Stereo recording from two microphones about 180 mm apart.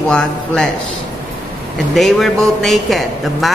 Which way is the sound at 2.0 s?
Centre (ahead or behind).